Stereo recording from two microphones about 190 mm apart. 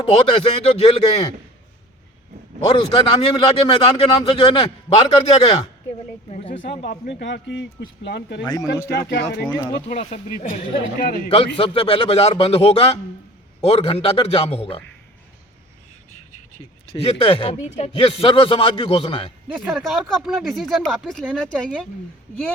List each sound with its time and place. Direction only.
0.0 s speech: 30° left (ahead or behind)
2.6 s a man's voice: 25° left (ahead or behind)
6.3 s a sound: 30° left (ahead or behind)
6.8 s speech: 45° left (ahead or behind)
7.2 s speech: 65° left (ahead or behind)
9.9 s speech: 35° left (ahead or behind)
11.3 s speech: 30° left (ahead or behind)
16.9 s a man's voice: 30° left (ahead or behind)
19.7 s speech: centre (ahead or behind)